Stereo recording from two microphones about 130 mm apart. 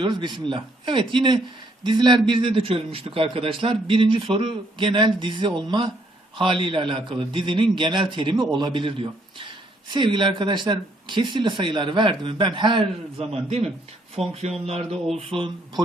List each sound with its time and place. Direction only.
0.0 s speech: 35° right (ahead or behind)
13.3 s speech: 55° right (ahead or behind)